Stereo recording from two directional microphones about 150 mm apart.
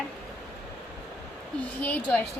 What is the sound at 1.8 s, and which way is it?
Speech, 10° left (ahead or behind).